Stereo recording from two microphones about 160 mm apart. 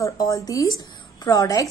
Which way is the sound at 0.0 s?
20° left (ahead or behind).